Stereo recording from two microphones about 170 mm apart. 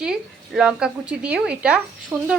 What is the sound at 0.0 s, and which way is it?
Speech, 5° right (ahead or behind).